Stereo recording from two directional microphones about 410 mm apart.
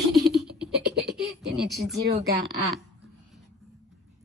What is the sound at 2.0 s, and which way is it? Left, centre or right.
Speech, right.